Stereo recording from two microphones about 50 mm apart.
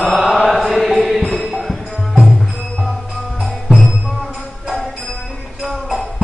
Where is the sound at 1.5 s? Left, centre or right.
Centre.